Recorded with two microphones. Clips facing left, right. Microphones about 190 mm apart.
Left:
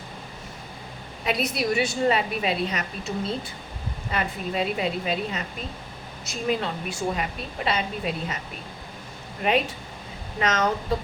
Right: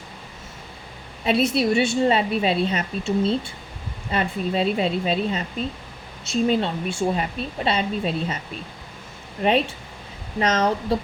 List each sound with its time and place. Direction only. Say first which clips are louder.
1.2 s a woman's voice: right 6 dB; 30° right (ahead or behind)
9.4 s a woman's voice: right 3 dB; 30° right (ahead or behind)